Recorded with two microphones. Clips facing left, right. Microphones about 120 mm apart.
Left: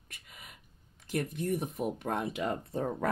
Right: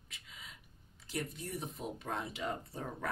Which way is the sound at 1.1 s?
55° left (ahead or behind).